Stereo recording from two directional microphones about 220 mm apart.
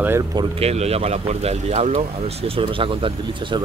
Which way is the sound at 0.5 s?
30° right (ahead or behind).